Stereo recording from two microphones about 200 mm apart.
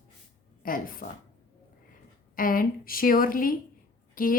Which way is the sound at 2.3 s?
45° left (ahead or behind).